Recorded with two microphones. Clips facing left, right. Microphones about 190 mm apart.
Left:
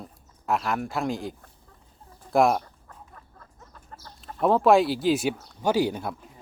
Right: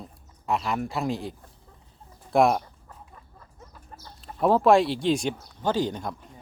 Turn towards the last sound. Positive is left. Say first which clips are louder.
# left 2 dB
turn(degrees=10)  # may be behind; listen again after turning